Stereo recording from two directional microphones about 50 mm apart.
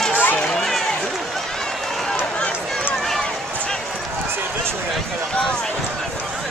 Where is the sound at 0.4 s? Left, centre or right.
Centre.